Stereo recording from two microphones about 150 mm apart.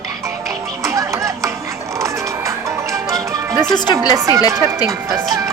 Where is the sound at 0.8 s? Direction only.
20° right (ahead or behind).